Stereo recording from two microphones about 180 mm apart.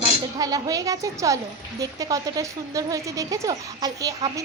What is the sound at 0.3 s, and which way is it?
Speech, 20° right (ahead or behind).